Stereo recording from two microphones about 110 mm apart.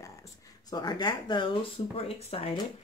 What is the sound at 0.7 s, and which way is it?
Speech, 40° left (ahead or behind).